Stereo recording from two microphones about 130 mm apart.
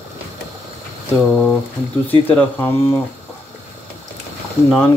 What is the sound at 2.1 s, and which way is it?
Speech, 15° left (ahead or behind).